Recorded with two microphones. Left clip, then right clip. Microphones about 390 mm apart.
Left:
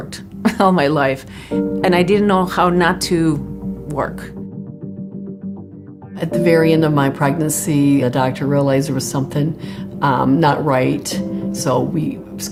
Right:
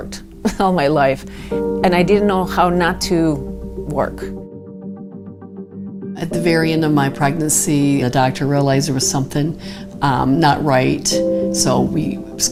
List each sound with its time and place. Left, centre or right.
0.4 s speech: right
3.8 s music: right
6.1 s a woman's voice: right